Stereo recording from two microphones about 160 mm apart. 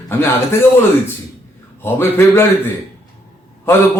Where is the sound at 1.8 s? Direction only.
15° left (ahead or behind).